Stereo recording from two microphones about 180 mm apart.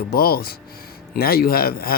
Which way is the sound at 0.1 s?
55° left (ahead or behind).